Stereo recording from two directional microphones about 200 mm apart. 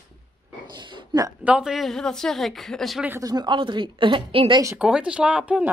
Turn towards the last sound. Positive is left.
turn(degrees=-5)  # may be behind; listen again after turning